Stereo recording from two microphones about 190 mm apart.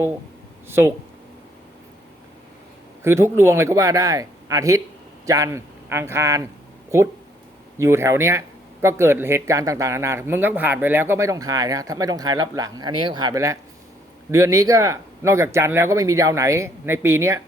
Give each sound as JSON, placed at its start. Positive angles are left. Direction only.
{"t": 0.7, "sound": "speech", "side_deg": -10}
{"t": 3.0, "sound": "speech", "side_deg": -15}
{"t": 7.8, "sound": "speech", "side_deg": -15}